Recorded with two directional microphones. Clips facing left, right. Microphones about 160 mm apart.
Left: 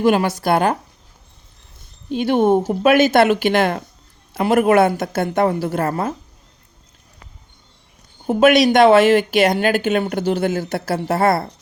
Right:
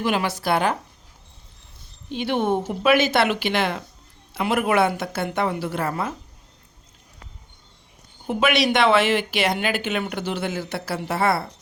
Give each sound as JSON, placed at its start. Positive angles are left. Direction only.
{"t": 0.0, "sound": "speech", "side_deg": 45}
{"t": 2.0, "sound": "speech", "side_deg": 45}
{"t": 8.3, "sound": "speech", "side_deg": 45}